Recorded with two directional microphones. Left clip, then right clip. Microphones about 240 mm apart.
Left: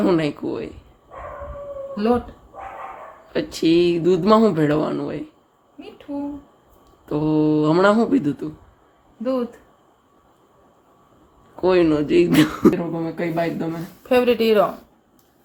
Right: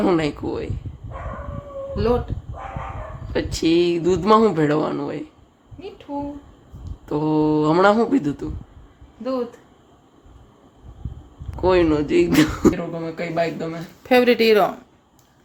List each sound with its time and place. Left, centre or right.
0.0 s speech: centre
3.3 s speech: centre
7.0 s speech: centre
11.6 s speech: centre
12.7 s speech: centre
14.1 s speech: right